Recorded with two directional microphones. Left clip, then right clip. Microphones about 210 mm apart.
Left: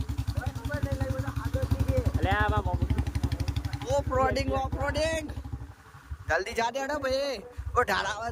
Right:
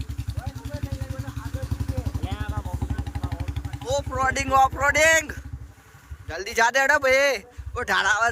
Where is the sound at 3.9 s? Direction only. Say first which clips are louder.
Right 2 dB; 10° left (ahead or behind).